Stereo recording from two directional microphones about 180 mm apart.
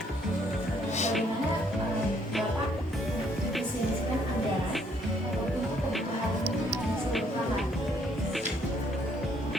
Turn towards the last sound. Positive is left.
turn(degrees=0)  # may be behind; listen again after turning